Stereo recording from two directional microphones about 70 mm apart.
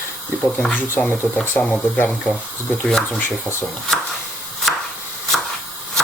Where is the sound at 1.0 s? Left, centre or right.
Left.